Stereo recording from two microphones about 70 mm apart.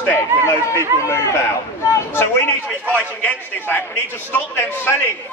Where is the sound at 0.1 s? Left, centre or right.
Left.